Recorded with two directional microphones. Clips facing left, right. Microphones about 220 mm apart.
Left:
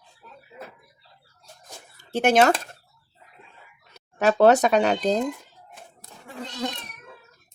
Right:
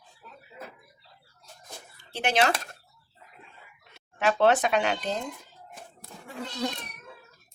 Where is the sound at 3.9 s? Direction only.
40° left (ahead or behind).